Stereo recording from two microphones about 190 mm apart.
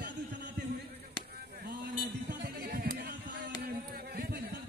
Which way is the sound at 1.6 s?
50° right (ahead or behind).